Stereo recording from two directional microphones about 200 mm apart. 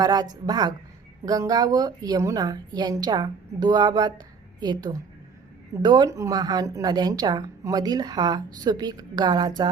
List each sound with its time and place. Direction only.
0.0 s a woman's voice: 20° right (ahead or behind)